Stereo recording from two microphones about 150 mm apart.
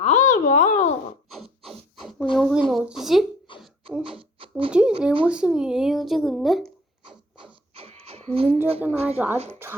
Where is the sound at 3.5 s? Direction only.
35° left (ahead or behind).